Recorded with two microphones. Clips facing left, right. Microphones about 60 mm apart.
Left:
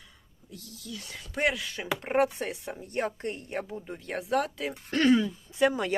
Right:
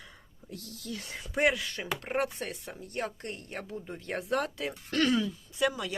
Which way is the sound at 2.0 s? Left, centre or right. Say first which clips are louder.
Left 7 dB; centre.